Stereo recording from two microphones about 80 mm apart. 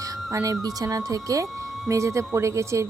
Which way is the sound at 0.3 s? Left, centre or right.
Right.